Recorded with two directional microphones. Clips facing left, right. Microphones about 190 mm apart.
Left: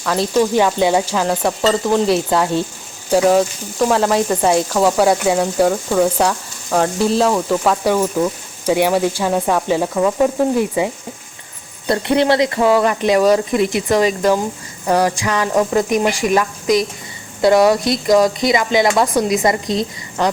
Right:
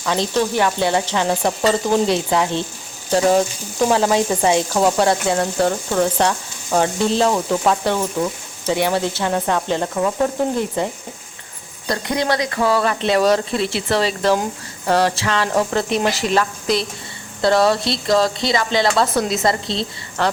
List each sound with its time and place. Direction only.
0.0 s frying: centre (ahead or behind)
0.5 s speech: 15° left (ahead or behind)
1.8 s frying: centre (ahead or behind)
11.9 s speech: 25° left (ahead or behind)